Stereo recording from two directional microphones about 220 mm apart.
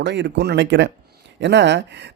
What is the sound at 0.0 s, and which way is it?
Speech, 55° right (ahead or behind).